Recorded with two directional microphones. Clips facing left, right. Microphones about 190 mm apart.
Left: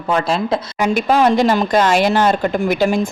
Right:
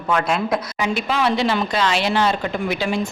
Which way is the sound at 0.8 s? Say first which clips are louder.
Left 8 dB; 45° left (ahead or behind).